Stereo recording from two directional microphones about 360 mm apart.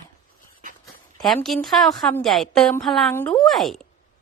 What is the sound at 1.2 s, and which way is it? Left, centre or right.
A woman's voice, centre.